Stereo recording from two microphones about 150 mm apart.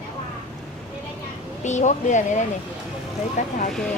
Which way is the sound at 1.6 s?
55° left (ahead or behind).